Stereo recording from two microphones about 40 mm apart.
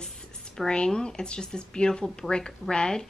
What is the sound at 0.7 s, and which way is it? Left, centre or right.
Speech, centre.